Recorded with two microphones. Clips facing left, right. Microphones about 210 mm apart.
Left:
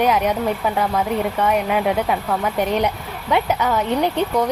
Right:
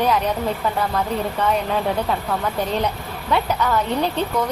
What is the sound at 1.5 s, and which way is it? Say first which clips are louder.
A woman's voice: left 2 dB; 15° left (ahead or behind).